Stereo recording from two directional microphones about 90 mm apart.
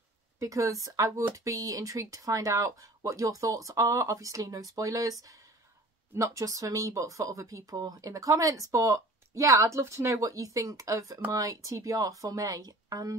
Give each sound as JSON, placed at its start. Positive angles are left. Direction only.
{"t": 0.4, "sound": "speech", "side_deg": -35}
{"t": 6.1, "sound": "speech", "side_deg": -35}